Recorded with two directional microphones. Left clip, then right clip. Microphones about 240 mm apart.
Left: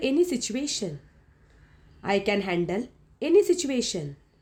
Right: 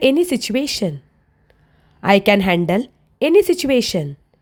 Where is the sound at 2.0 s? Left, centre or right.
Right.